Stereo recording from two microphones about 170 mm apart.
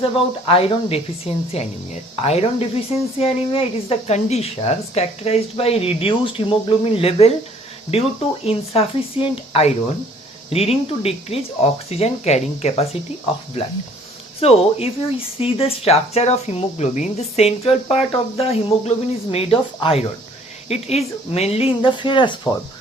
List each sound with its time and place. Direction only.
0.0 s speech: 35° left (ahead or behind)